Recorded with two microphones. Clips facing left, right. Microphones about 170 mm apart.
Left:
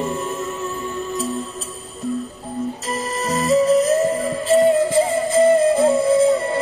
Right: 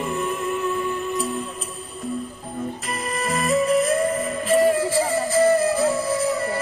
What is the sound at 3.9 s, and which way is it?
Music, 25° left (ahead or behind).